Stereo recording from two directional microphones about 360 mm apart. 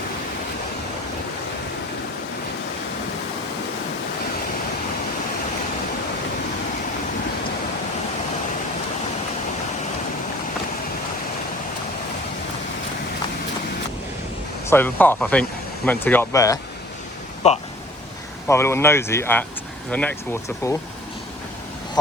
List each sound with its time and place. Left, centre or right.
14.7 s speech: centre
18.4 s speech: centre